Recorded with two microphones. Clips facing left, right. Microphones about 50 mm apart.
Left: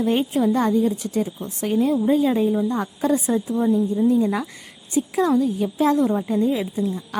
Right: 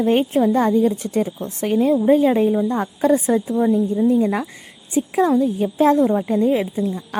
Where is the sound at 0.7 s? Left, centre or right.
Right.